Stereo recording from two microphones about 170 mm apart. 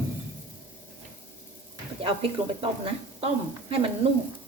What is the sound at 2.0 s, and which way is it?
A woman's voice, 35° right (ahead or behind).